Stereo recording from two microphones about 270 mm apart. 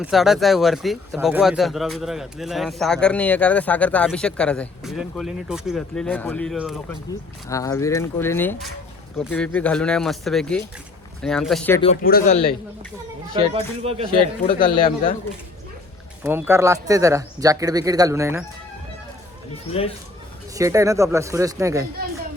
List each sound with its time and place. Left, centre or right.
0.0 s speech: centre
7.4 s speech: centre
12.0 s speech: left
13.3 s speech: right
14.6 s speech: centre
16.2 s speech: centre
20.6 s speech: centre